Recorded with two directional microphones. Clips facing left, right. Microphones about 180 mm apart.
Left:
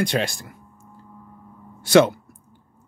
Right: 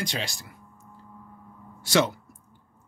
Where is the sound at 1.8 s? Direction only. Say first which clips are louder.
Left 8 dB; 60° left (ahead or behind).